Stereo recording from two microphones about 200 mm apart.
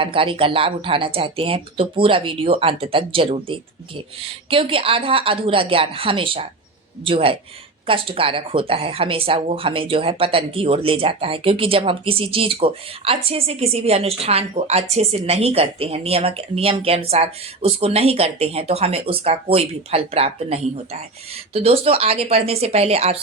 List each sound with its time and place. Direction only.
0.0 s speech: 25° right (ahead or behind)